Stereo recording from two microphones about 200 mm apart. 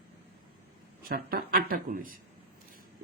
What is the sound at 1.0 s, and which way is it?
Speech, 45° right (ahead or behind).